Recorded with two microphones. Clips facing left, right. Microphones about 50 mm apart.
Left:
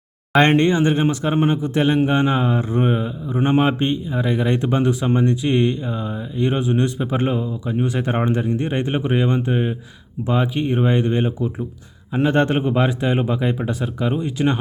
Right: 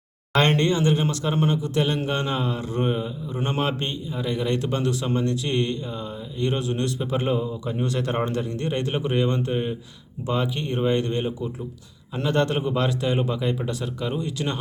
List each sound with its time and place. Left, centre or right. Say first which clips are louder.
0.3 s a man's voice: left 5 dB; left
7.2 s a man's voice: left 2 dB; centre